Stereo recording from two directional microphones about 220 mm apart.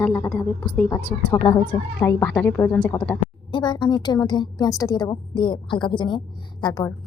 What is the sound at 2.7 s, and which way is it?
A woman's voice, 20° left (ahead or behind).